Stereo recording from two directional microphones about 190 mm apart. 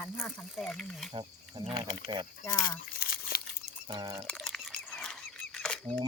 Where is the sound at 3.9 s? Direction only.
20° right (ahead or behind).